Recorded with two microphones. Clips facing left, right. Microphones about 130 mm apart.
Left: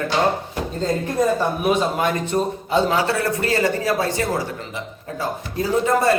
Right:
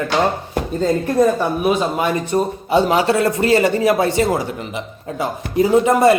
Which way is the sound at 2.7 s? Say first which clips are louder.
Right 5 dB; 15° right (ahead or behind).